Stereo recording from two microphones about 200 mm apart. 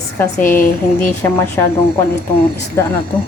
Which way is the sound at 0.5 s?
45° left (ahead or behind).